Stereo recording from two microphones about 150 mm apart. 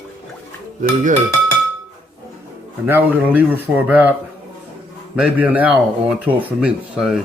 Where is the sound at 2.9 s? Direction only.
10° right (ahead or behind).